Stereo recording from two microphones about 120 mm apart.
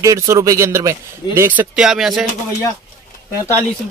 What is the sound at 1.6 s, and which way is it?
Speech, 5° right (ahead or behind).